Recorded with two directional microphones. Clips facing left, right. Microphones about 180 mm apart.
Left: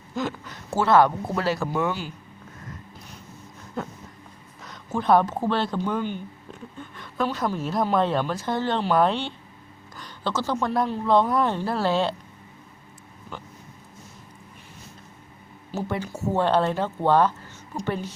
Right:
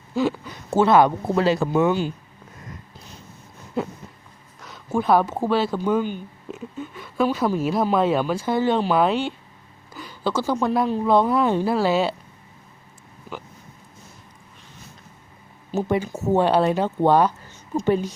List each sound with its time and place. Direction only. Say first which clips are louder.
0.2 s speech: right 7 dB; 10° right (ahead or behind)
4.6 s speech: right 3 dB; 5° right (ahead or behind)
15.7 s speech: right 6 dB; 15° right (ahead or behind)